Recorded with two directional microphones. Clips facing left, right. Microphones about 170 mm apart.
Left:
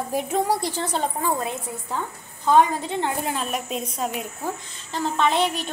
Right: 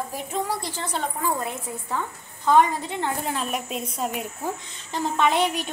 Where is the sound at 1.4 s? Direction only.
15° left (ahead or behind).